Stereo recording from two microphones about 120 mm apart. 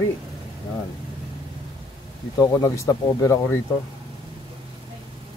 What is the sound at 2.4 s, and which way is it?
Speech, 30° left (ahead or behind).